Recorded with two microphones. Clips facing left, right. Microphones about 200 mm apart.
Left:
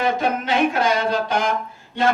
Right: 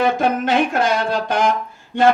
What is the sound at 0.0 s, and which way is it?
A man's voice, 50° right (ahead or behind).